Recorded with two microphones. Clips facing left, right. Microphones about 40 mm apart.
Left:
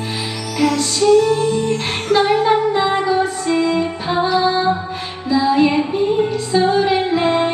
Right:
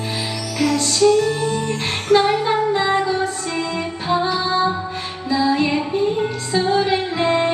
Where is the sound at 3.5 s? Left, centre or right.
Left.